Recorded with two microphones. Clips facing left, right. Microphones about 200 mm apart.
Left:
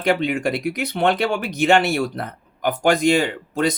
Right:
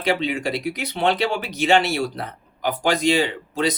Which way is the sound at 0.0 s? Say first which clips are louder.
Left 3 dB; 55° left (ahead or behind).